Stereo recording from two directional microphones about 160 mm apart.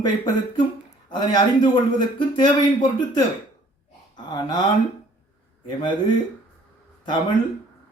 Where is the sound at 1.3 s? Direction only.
25° left (ahead or behind).